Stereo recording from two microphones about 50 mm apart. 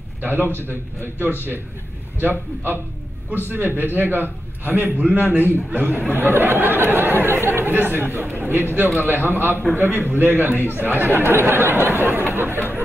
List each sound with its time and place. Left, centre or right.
0.2 s a man's voice: right